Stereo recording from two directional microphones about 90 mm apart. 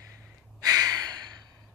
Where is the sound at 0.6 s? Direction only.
45° right (ahead or behind).